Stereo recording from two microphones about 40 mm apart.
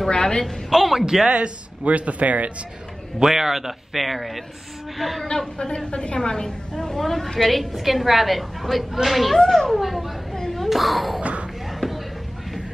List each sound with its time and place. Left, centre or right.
0.1 s speech: centre
0.7 s a woman's voice: centre
1.0 s a man's voice: centre
1.3 s speech: right
3.2 s a woman's voice: centre
5.3 s a woman's voice: centre
10.3 s a sound: centre
11.6 s music: centre